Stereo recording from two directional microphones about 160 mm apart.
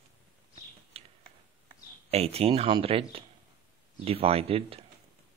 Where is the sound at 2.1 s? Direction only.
40° right (ahead or behind).